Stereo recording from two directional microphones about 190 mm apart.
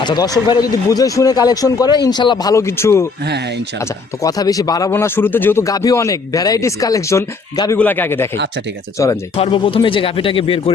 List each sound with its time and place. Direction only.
0.0 s speech: 25° left (ahead or behind)
9.3 s speech: 30° left (ahead or behind)